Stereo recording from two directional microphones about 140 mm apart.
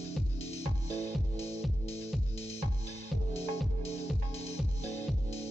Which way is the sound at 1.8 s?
45° left (ahead or behind).